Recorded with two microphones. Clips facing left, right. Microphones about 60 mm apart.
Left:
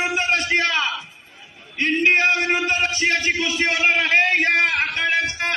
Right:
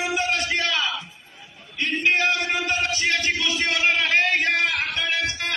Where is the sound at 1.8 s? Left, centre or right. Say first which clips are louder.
Left 4 dB; left.